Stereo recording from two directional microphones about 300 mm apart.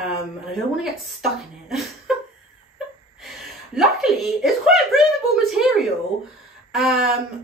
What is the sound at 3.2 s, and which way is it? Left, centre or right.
Speech, centre.